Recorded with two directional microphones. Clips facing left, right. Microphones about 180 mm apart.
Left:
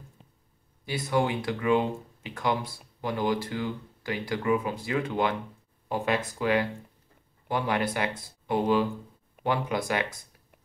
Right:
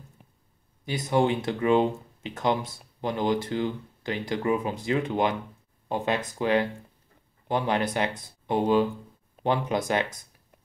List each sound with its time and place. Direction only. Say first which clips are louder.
0.8 s speech: right 3 dB; 20° right (ahead or behind)